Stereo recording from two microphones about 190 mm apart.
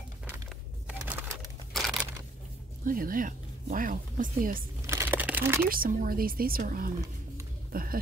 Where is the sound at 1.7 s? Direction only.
Centre (ahead or behind).